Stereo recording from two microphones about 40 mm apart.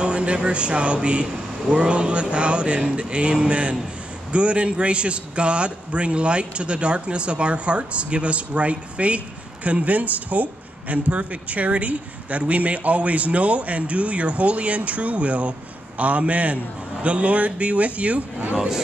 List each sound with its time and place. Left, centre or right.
0.0 s speech: right